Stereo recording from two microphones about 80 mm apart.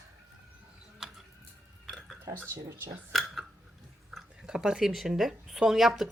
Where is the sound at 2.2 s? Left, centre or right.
Right.